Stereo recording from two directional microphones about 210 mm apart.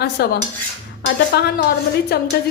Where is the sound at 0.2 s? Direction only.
50° left (ahead or behind).